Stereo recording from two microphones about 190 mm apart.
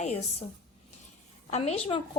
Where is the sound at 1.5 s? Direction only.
35° left (ahead or behind).